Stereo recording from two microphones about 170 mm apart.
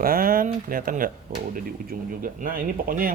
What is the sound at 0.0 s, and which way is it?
Speech, 60° right (ahead or behind).